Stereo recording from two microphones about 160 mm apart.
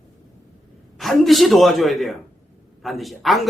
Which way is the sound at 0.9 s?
Centre (ahead or behind).